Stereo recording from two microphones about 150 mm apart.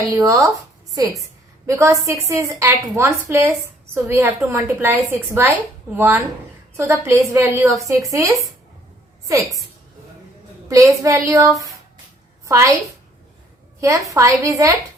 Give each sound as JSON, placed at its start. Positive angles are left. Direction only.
{"t": 0.1, "sound": "a woman's voice", "side_deg": -20}
{"t": 1.6, "sound": "a woman's voice", "side_deg": -20}
{"t": 10.7, "sound": "a woman's voice", "side_deg": -20}
{"t": 13.8, "sound": "a woman's voice", "side_deg": -20}